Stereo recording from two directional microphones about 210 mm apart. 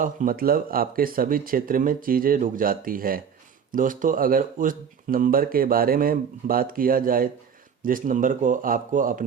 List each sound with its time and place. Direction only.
0.0 s speech: 40° right (ahead or behind)